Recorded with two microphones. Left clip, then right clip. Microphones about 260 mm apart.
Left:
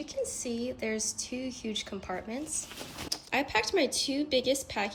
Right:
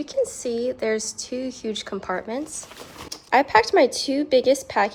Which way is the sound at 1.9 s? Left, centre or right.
Right.